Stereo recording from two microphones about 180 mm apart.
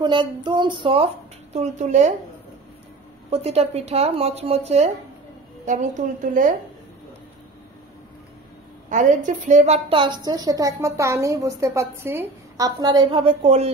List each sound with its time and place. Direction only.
0.0 s a woman's voice: 25° right (ahead or behind)
3.3 s a woman's voice: 35° right (ahead or behind)
8.8 s a woman's voice: 45° right (ahead or behind)